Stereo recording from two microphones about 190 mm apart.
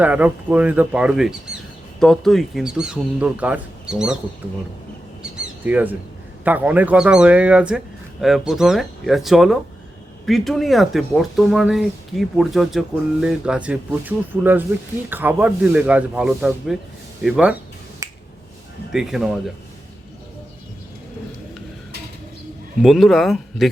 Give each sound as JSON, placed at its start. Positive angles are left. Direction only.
{"t": 0.0, "sound": "speech", "side_deg": -10}
{"t": 5.2, "sound": "mouse", "side_deg": -10}
{"t": 6.4, "sound": "speech", "side_deg": -10}
{"t": 18.0, "sound": "finger snapping", "side_deg": -15}
{"t": 18.9, "sound": "speech", "side_deg": 0}
{"t": 22.8, "sound": "speech", "side_deg": 0}